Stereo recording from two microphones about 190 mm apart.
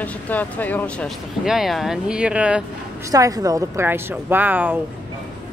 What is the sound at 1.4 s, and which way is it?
Speech, centre (ahead or behind).